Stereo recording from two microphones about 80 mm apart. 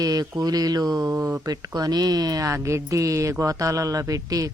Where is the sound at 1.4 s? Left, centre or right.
Right.